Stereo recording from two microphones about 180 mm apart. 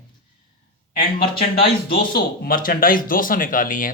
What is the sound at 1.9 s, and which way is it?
Speech, 55° left (ahead or behind).